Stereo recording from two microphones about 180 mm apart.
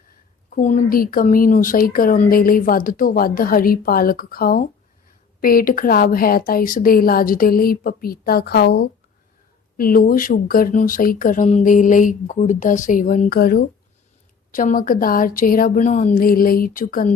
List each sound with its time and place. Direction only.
0.5 s a woman's voice: 45° left (ahead or behind)